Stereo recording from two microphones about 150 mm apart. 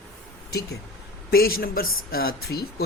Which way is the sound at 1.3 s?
90° left.